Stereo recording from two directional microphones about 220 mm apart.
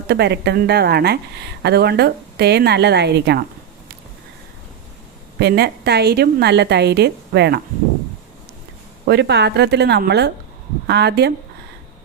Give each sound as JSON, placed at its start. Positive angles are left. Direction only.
{"t": 0.1, "sound": "speech", "side_deg": -50}
{"t": 5.4, "sound": "speech", "side_deg": -45}
{"t": 9.0, "sound": "speech", "side_deg": -50}